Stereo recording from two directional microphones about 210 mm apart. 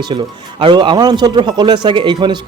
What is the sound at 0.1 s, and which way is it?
Speech, 25° right (ahead or behind).